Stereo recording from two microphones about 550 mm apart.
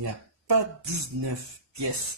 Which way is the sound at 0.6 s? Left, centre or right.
Right.